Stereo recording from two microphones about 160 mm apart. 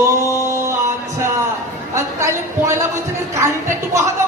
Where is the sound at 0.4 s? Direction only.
20° right (ahead or behind).